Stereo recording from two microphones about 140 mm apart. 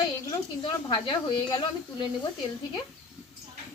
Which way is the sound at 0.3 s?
35° left (ahead or behind).